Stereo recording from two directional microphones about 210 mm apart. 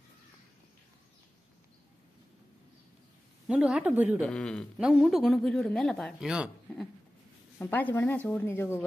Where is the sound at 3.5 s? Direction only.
5° right (ahead or behind).